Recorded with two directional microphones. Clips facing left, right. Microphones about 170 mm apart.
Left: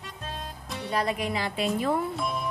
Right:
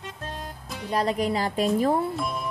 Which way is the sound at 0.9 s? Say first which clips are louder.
Right 4 dB; 35° right (ahead or behind).